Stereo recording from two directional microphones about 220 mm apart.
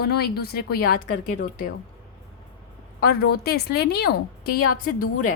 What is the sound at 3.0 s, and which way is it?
A woman's voice, 45° left (ahead or behind).